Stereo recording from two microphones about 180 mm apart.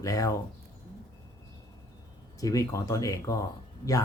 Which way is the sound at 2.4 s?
20° left (ahead or behind).